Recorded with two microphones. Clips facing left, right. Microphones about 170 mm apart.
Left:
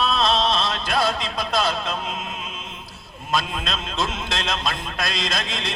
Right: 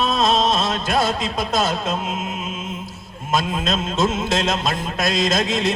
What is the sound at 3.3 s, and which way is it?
Speech, 20° right (ahead or behind).